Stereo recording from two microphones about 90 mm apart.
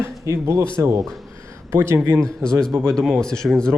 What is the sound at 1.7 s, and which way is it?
Speech, 30° right (ahead or behind).